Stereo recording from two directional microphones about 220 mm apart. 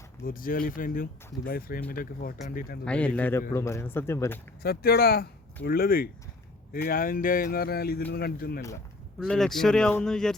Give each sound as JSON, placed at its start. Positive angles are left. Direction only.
{"t": 0.3, "sound": "speech", "side_deg": 40}
{"t": 2.8, "sound": "speech", "side_deg": 5}
{"t": 4.6, "sound": "speech", "side_deg": 45}
{"t": 9.2, "sound": "speech", "side_deg": 5}